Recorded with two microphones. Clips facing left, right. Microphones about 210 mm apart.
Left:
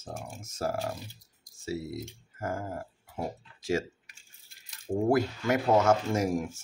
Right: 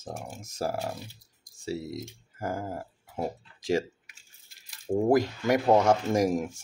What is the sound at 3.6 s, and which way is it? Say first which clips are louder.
Speech: right 3 dB; 15° right (ahead or behind).